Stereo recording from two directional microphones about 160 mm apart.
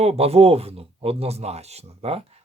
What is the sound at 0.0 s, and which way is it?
Speech, 40° right (ahead or behind).